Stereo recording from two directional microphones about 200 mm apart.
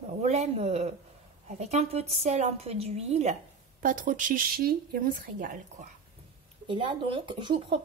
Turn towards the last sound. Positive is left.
turn(degrees=-25)  # may be behind; listen again after turning